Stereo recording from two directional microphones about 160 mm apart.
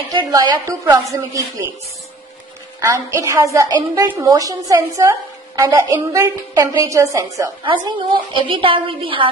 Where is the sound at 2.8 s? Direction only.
20° right (ahead or behind).